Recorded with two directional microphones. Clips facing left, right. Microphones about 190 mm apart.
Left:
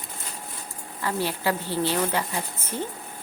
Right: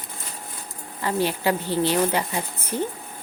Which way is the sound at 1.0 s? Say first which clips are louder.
Right 3 dB; 20° right (ahead or behind).